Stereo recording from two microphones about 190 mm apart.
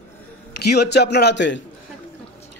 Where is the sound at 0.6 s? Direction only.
55° left (ahead or behind).